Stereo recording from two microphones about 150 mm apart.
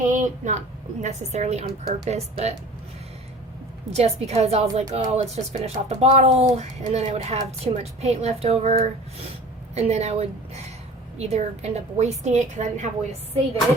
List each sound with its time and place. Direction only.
0.0 s a sound: 55° right (ahead or behind)
1.0 s a woman's voice: 50° right (ahead or behind)
3.9 s a woman's voice: 45° right (ahead or behind)